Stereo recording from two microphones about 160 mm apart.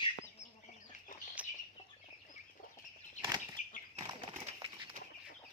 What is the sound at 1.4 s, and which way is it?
Bird, 10° right (ahead or behind).